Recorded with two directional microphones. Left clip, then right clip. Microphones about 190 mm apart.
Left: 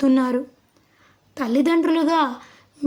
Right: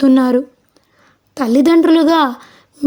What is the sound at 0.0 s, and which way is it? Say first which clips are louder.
A woman's voice: right 7 dB; 40° right (ahead or behind).